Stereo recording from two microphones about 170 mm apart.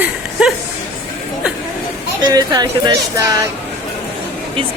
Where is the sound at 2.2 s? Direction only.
20° right (ahead or behind).